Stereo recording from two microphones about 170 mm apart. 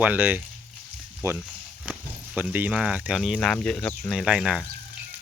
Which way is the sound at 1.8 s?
5° right (ahead or behind).